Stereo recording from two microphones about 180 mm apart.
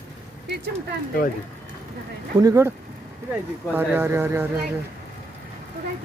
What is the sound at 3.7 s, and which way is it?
Speech, 10° right (ahead or behind).